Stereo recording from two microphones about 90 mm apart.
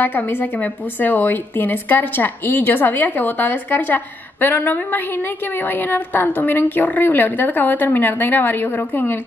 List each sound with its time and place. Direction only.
0.0 s a woman's voice: 20° left (ahead or behind)